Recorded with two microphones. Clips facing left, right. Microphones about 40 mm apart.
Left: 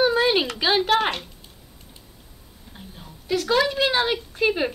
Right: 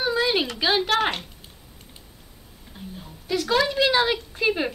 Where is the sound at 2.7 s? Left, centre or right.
Centre.